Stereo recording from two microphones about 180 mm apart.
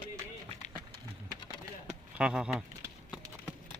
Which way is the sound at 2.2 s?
5° right (ahead or behind).